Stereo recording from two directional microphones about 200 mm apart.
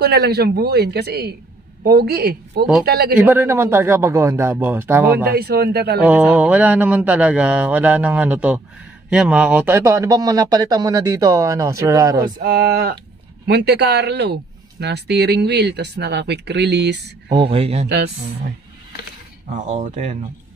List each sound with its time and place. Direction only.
0.0 s speech: 50° right (ahead or behind)
3.2 s speech: 10° right (ahead or behind)
5.3 s speech: 50° right (ahead or behind)
6.0 s speech: 5° right (ahead or behind)
12.2 s speech: 50° right (ahead or behind)
17.3 s speech: 25° right (ahead or behind)
17.8 s speech: 55° right (ahead or behind)
19.5 s speech: 40° right (ahead or behind)